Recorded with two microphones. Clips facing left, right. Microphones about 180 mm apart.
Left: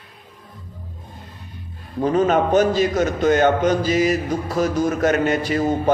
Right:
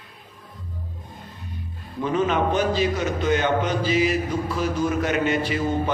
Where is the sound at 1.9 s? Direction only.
40° left (ahead or behind).